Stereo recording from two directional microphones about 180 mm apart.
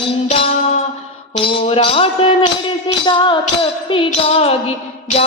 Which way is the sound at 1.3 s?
30° left (ahead or behind).